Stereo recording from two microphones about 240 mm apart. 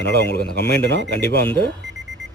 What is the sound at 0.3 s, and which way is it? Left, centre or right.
Speech, left.